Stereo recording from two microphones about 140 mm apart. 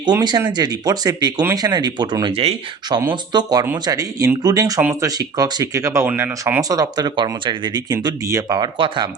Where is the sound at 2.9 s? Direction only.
30° right (ahead or behind); by 6.3 s 15° right (ahead or behind).